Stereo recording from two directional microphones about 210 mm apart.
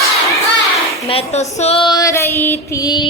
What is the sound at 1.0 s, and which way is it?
Speech, 30° left (ahead or behind).